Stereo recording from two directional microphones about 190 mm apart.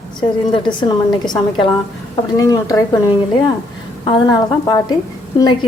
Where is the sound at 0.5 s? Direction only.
25° left (ahead or behind).